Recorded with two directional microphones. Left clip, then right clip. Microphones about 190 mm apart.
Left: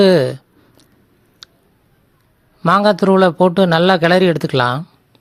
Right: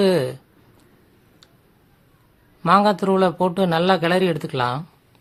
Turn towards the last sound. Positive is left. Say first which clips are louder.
# left 7 dB
turn(degrees=35)  # may be behind; listen again after turning